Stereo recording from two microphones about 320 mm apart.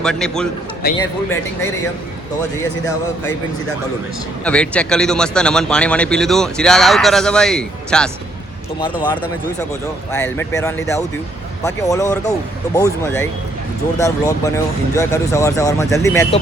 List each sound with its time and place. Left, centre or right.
0.0 s a man's voice: centre
0.8 s a man's voice: left
4.4 s a man's voice: centre
8.8 s speech: centre